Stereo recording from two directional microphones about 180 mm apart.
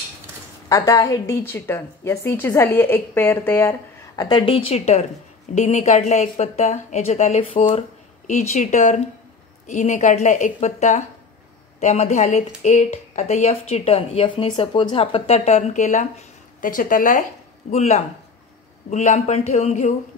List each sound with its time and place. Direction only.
0.7 s a woman's voice: 20° left (ahead or behind)
4.2 s a woman's voice: 25° left (ahead or behind); by 17.2 s 50° left (ahead or behind)
17.6 s a woman's voice: 40° left (ahead or behind)